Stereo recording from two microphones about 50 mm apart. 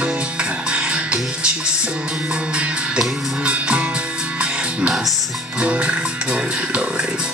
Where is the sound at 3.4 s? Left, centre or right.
Right.